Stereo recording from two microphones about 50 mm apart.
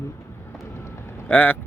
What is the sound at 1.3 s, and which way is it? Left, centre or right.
Speech, left.